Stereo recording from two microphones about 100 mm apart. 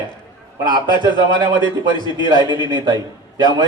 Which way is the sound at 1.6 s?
50° left (ahead or behind).